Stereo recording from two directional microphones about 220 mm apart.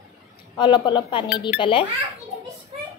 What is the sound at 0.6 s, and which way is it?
Speech, 20° left (ahead or behind).